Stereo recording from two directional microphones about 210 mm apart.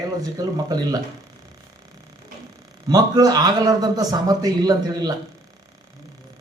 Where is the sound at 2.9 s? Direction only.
15° right (ahead or behind).